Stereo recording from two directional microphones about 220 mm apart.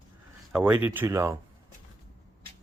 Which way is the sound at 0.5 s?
10° right (ahead or behind).